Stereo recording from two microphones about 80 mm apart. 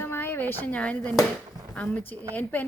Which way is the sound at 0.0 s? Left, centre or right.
Left.